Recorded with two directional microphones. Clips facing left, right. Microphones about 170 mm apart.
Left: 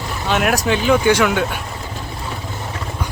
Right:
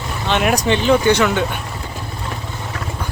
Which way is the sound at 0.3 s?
5° left (ahead or behind).